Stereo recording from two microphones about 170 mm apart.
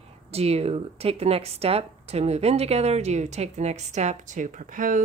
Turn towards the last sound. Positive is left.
turn(degrees=-50)  # may be behind; listen again after turning